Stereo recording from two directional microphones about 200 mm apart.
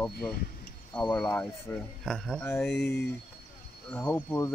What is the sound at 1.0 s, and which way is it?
Speech, 20° left (ahead or behind).